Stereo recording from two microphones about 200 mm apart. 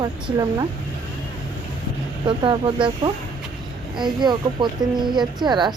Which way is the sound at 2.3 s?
25° right (ahead or behind).